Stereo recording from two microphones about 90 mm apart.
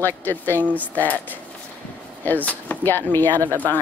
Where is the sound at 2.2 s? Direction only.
20° left (ahead or behind).